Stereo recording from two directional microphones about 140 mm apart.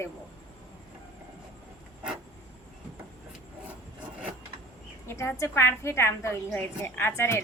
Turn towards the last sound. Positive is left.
turn(degrees=15)  # may be behind; listen again after turning